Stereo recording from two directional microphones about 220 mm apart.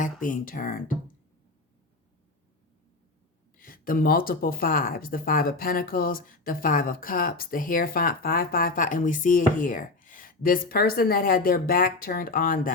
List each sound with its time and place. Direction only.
0.0 s speech: 40° left (ahead or behind)
3.6 s speech: 40° left (ahead or behind)